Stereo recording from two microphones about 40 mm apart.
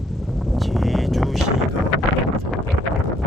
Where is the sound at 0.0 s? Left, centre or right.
Centre.